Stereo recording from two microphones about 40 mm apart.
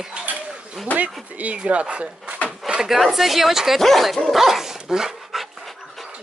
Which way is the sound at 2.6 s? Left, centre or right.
Centre.